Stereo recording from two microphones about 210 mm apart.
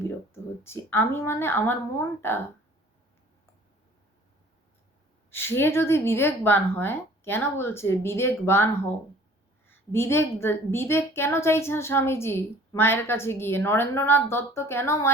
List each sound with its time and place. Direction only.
0.6 s a woman's voice: 10° left (ahead or behind)
5.3 s a woman's voice: 10° left (ahead or behind)